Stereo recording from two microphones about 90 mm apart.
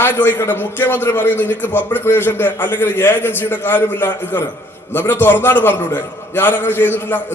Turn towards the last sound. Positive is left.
turn(degrees=20)  # may be behind; listen again after turning